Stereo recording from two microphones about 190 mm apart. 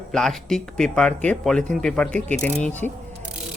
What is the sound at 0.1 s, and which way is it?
Speech, centre (ahead or behind).